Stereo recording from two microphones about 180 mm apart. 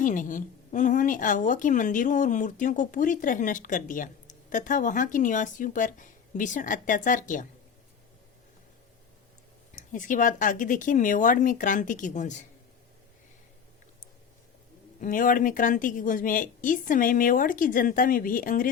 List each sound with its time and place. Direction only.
0.0 s a woman's voice: 45° left (ahead or behind)
9.7 s a woman's voice: 45° left (ahead or behind)
15.0 s a woman's voice: 50° left (ahead or behind)